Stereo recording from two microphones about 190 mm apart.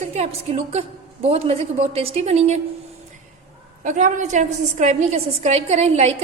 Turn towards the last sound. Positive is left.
turn(degrees=-30)  # may be behind; listen again after turning